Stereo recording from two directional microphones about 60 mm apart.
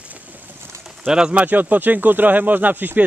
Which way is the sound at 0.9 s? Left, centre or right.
Centre.